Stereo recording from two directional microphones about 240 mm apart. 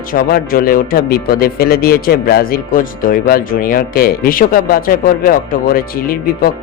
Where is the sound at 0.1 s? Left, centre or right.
Left.